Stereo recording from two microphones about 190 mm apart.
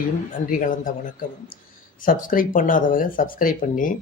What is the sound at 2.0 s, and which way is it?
Speech, 45° left (ahead or behind).